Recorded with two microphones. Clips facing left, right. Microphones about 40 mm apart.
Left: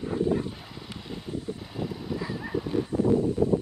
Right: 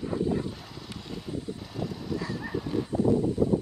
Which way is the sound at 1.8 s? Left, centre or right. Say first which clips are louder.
Even; centre.